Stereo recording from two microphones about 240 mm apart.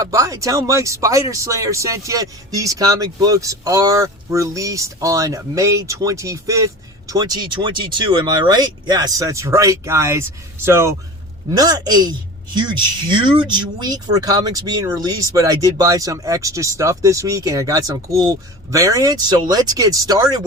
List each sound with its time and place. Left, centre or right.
0.0 s speech: centre